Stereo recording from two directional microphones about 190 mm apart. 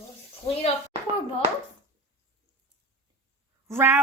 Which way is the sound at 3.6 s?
10° right (ahead or behind).